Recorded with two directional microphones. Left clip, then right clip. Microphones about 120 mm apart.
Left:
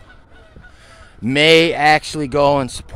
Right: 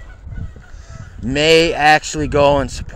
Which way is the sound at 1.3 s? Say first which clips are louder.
Left 1 dB; 30° left (ahead or behind).